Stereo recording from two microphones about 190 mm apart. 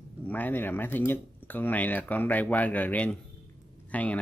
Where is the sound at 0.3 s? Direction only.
10° left (ahead or behind).